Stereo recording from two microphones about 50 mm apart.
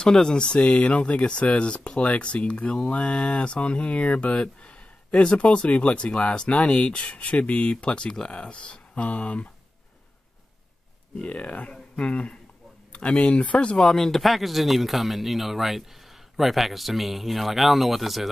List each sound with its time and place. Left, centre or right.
0.0 s speech: centre
11.1 s speech: left
13.7 s speech: centre